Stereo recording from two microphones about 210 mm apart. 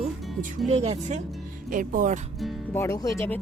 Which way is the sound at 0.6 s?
30° right (ahead or behind).